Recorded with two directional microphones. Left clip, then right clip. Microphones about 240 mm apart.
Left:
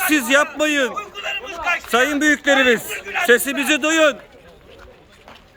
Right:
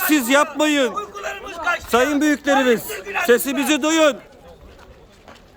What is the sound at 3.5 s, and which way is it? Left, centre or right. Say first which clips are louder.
Speech: left 1 dB; centre.